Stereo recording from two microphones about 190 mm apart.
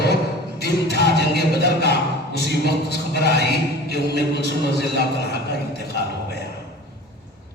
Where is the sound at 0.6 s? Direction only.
60° left (ahead or behind).